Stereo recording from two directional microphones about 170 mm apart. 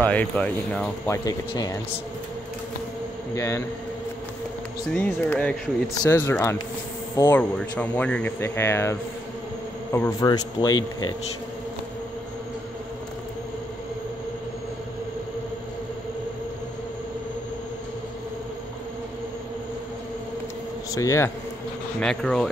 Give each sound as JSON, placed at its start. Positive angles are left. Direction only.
{"t": 0.0, "sound": "speech", "side_deg": 5}
{"t": 1.0, "sound": "a man's voice", "side_deg": 15}
{"t": 3.3, "sound": "speech", "side_deg": 15}
{"t": 4.9, "sound": "speech", "side_deg": 10}
{"t": 9.9, "sound": "a man's voice", "side_deg": 20}
{"t": 20.9, "sound": "a man's voice", "side_deg": 20}
{"t": 22.0, "sound": "speech", "side_deg": 5}